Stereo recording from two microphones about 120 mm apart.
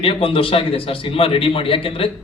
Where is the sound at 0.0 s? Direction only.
50° left (ahead or behind).